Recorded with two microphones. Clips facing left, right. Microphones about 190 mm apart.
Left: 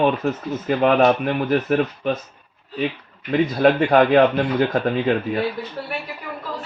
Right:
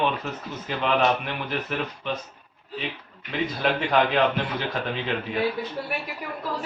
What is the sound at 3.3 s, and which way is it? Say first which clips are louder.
A man's voice: left 9 dB; 50° left (ahead or behind).